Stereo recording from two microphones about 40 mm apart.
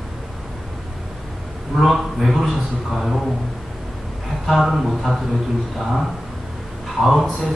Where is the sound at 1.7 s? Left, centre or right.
Centre.